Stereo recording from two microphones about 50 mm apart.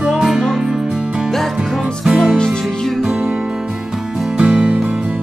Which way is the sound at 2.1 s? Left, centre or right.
Right.